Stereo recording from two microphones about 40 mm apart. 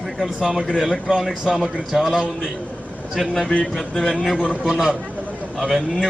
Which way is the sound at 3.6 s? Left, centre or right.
Centre.